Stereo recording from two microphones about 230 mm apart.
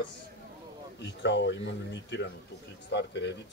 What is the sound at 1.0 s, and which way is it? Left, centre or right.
A man's voice, left.